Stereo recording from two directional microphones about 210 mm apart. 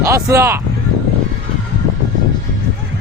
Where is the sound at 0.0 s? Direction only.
15° right (ahead or behind).